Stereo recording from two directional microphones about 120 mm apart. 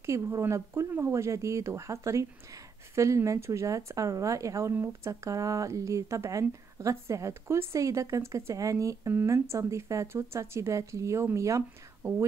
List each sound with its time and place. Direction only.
0.0 s a woman's voice: 25° right (ahead or behind)